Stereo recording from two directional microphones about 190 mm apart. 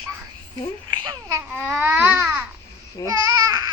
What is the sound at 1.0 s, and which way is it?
Babbling, 15° right (ahead or behind).